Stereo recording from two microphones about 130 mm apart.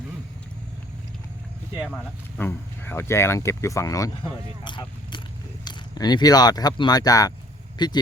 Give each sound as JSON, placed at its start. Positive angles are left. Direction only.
{"t": 1.9, "sound": "speech", "side_deg": 5}
{"t": 2.5, "sound": "speech", "side_deg": 20}
{"t": 4.6, "sound": "speech", "side_deg": 35}